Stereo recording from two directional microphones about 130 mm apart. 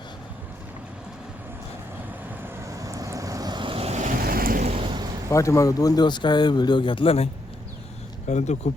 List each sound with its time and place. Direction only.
2.4 s vehicle: 25° right (ahead or behind); by 4.9 s 55° right (ahead or behind)
4.9 s a sound: 30° right (ahead or behind)
5.3 s speech: 25° left (ahead or behind); by 7.3 s 45° left (ahead or behind)
8.3 s speech: 60° left (ahead or behind)